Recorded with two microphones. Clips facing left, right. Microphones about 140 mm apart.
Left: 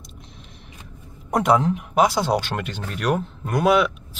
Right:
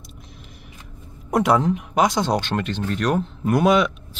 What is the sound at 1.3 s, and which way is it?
Speech, centre (ahead or behind).